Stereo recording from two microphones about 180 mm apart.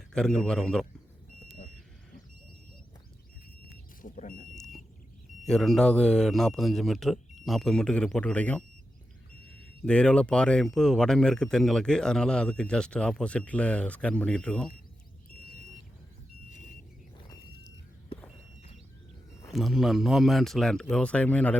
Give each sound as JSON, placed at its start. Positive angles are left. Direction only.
{"t": 0.1, "sound": "speech", "side_deg": 5}
{"t": 4.0, "sound": "speech", "side_deg": 45}
{"t": 4.5, "sound": "smoke detector", "side_deg": 0}
{"t": 5.5, "sound": "speech", "side_deg": 0}
{"t": 9.8, "sound": "speech", "side_deg": 5}
{"t": 19.5, "sound": "speech", "side_deg": 0}